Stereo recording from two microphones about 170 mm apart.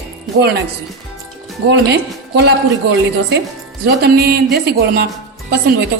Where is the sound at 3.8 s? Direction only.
70° right (ahead or behind).